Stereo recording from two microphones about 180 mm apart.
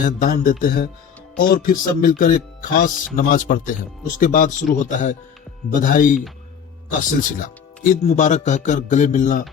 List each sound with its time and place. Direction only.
0.0 s speech: 45° left (ahead or behind)